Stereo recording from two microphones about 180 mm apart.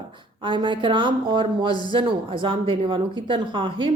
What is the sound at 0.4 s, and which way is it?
Speech, 25° right (ahead or behind).